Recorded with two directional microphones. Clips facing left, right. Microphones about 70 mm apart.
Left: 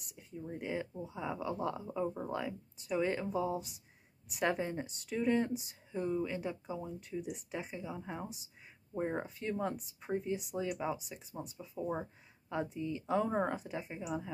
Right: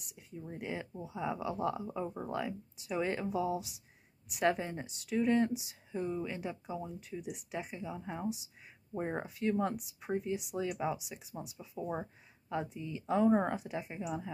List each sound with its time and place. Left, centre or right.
0.0 s speech: centre